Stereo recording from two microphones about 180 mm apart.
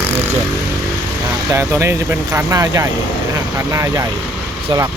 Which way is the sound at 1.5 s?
15° right (ahead or behind).